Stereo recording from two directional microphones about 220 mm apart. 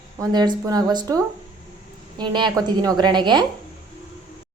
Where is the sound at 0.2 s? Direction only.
15° right (ahead or behind).